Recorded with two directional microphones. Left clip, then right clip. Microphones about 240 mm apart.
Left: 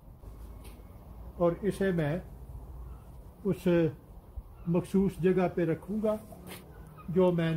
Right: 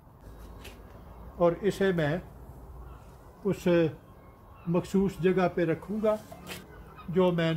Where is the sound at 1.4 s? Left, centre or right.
Centre.